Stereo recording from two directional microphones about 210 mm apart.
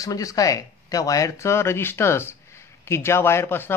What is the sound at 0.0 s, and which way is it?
Speech, 15° left (ahead or behind).